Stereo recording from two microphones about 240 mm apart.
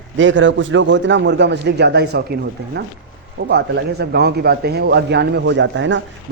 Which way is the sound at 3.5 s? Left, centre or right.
Right.